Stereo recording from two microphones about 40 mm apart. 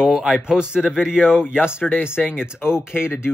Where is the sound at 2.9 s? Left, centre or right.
Left.